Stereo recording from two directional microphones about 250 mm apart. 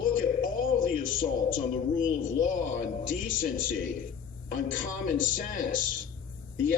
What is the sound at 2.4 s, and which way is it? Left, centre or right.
Speech, left.